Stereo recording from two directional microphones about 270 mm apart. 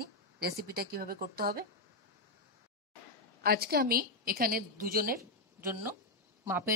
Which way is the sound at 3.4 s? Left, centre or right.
Right.